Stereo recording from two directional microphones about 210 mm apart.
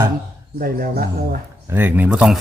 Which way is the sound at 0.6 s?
45° right (ahead or behind).